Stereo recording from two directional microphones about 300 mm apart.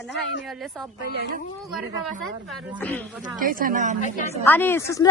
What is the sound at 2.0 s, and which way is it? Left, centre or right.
Speech, centre.